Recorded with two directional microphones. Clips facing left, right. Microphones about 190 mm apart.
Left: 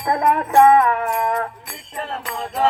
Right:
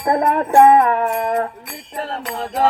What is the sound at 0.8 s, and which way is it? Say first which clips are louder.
Music: right 2 dB; 40° right (ahead or behind).